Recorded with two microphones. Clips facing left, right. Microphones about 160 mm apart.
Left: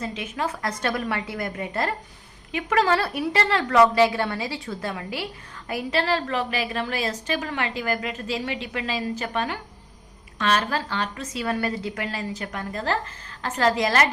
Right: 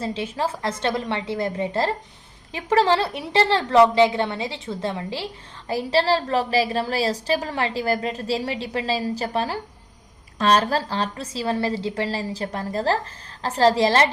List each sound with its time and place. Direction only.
0.0 s a woman's voice: 30° right (ahead or behind)